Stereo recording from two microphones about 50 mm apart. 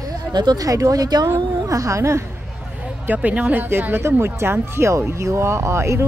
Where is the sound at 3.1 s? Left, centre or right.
Right.